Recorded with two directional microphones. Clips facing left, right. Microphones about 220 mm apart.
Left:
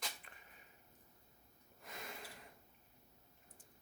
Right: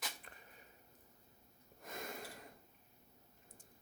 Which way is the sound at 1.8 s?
45° right (ahead or behind).